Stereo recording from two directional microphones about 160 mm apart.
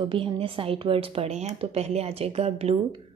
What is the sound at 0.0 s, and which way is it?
Speech, 35° right (ahead or behind).